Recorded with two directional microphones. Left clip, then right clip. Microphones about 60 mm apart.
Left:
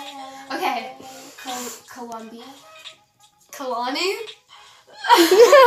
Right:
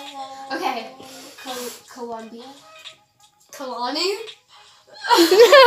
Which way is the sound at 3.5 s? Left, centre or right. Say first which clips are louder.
Left 2 dB; left.